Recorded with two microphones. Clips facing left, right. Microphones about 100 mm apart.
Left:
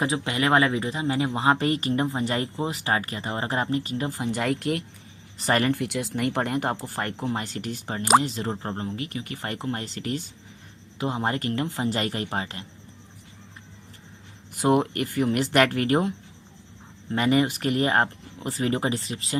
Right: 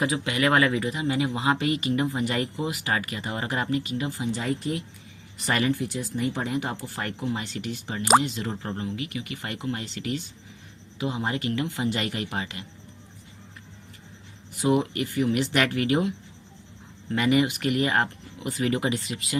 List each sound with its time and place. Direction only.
0.0 s speech: 30° left (ahead or behind); by 4.8 s 70° left (ahead or behind)
5.4 s speech: 40° left (ahead or behind)
14.5 s speech: 50° left (ahead or behind); by 19.4 s 35° left (ahead or behind)